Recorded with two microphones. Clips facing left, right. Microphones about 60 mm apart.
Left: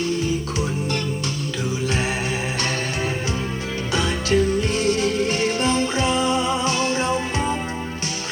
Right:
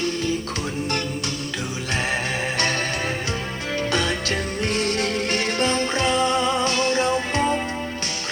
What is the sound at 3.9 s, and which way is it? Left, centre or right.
Music, right.